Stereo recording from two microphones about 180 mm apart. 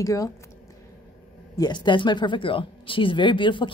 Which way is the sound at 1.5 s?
25° left (ahead or behind).